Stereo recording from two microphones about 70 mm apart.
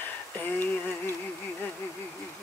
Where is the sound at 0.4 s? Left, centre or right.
Left.